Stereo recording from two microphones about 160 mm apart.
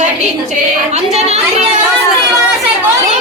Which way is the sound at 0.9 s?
45° right (ahead or behind).